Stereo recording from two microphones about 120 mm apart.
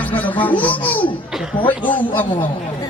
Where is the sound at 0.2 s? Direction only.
15° left (ahead or behind).